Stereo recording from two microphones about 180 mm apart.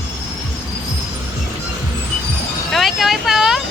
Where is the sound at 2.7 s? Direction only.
Centre (ahead or behind).